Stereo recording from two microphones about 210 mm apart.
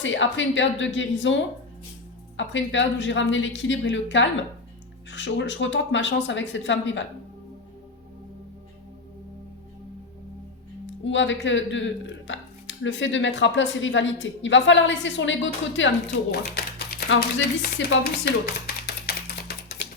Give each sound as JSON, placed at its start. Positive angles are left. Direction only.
{"t": 0.0, "sound": "speech", "side_deg": 60}
{"t": 11.0, "sound": "speech", "side_deg": 60}
{"t": 16.3, "sound": "speech", "side_deg": 50}
{"t": 18.4, "sound": "typewriter", "side_deg": 50}